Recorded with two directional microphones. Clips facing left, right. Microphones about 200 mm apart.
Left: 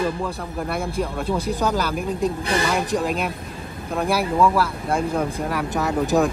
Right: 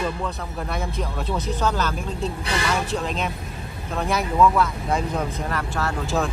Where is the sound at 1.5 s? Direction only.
10° left (ahead or behind).